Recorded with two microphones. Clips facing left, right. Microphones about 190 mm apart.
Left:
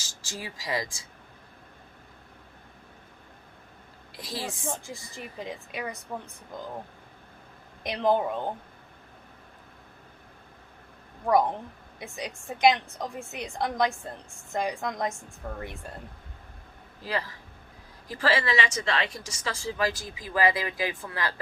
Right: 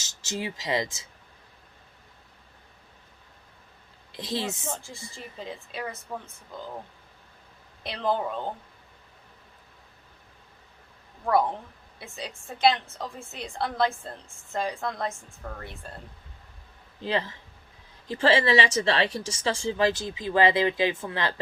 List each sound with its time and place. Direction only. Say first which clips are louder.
0.0 s speech: right 6 dB; 20° right (ahead or behind)
4.1 s speech: right 5 dB; 25° right (ahead or behind)
4.7 s a woman's voice: left 1 dB; 15° left (ahead or behind)
7.9 s a woman's voice: left 3 dB; 15° left (ahead or behind)
11.9 s a woman's voice: left 2 dB; 15° left (ahead or behind)
17.0 s speech: right 4 dB; 25° right (ahead or behind)